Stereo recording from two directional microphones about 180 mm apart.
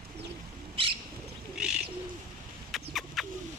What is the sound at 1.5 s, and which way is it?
Bird, 5° right (ahead or behind).